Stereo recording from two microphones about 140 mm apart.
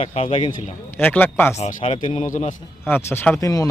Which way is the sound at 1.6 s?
50° left (ahead or behind).